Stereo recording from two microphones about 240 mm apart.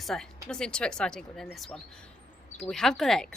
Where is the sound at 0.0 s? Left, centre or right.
Centre.